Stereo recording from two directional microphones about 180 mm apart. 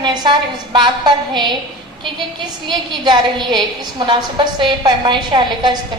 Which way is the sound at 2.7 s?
25° right (ahead or behind).